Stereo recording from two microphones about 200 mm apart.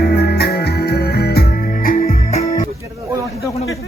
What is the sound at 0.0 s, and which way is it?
Music, 55° left (ahead or behind).